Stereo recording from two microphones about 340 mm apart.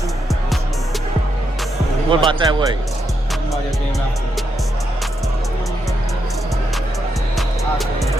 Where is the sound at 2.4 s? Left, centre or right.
Centre.